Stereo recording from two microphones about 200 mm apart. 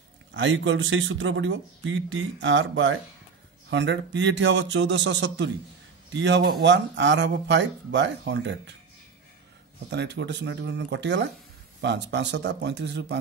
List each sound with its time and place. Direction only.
0.3 s speech: 65° right (ahead or behind)
9.8 s speech: 60° right (ahead or behind)